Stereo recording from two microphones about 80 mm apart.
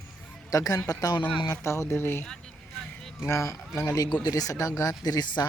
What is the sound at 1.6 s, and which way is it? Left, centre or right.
Speech, left.